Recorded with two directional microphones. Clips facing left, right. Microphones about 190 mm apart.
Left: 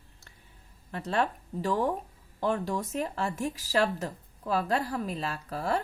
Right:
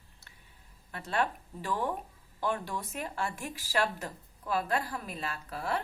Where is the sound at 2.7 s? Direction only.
40° left (ahead or behind).